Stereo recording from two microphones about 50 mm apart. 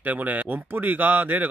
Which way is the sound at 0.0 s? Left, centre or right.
Right.